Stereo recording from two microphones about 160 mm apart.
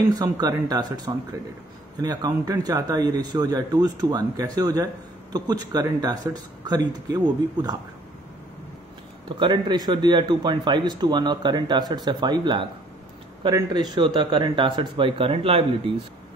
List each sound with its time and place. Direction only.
0.1 s speech: 20° right (ahead or behind)
9.4 s a man's voice: 30° right (ahead or behind)